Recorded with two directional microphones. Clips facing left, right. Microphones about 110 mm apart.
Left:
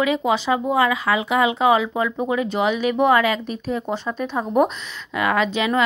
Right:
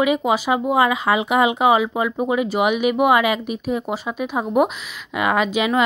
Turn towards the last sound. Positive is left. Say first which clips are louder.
# right 1 dB
turn(degrees=-15)  # may be behind; listen again after turning